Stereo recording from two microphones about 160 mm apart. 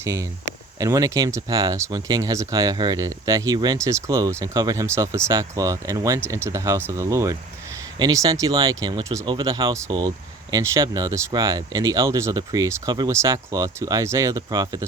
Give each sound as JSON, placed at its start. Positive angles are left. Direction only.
{"t": 0.0, "sound": "speech", "side_deg": -20}